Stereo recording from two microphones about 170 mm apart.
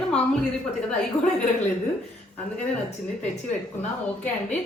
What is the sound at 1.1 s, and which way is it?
Speech, 20° left (ahead or behind).